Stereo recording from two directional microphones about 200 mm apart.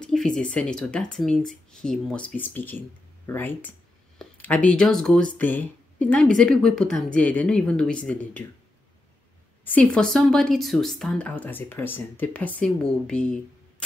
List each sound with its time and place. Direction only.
0.0 s speech: 5° left (ahead or behind)
9.7 s speech: 5° left (ahead or behind)